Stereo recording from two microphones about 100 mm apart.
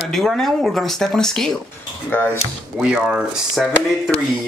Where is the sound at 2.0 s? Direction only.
20° left (ahead or behind).